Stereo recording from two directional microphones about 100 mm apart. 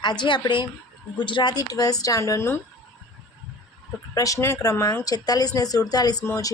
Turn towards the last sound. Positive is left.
turn(degrees=30)  # may be behind; listen again after turning